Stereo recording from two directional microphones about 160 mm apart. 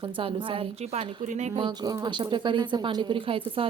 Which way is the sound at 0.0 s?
35° right (ahead or behind).